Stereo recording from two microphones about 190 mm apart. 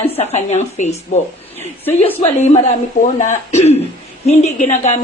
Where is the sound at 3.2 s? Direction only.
35° left (ahead or behind).